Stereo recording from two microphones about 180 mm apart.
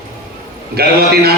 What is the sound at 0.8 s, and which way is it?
Speech, 60° right (ahead or behind).